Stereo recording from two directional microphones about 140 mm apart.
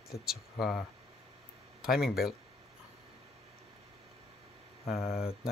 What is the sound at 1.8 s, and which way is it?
Speech, 5° right (ahead or behind).